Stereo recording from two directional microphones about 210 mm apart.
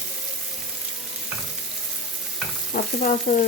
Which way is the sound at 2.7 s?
40° left (ahead or behind).